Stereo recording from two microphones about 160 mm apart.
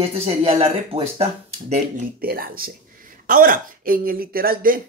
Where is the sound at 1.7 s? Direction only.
50° right (ahead or behind).